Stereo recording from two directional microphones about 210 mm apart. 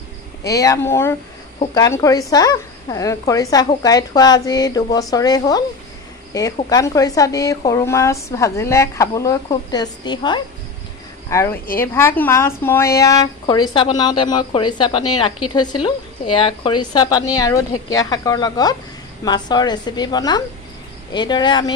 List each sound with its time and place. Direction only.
0.4 s a woman's voice: 15° left (ahead or behind)